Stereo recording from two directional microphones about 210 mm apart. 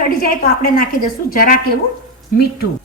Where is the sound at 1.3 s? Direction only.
40° left (ahead or behind).